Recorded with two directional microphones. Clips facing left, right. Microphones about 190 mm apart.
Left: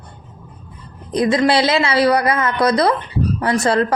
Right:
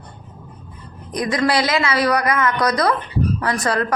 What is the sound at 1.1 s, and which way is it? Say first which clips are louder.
A woman's voice: left 4 dB; 25° left (ahead or behind).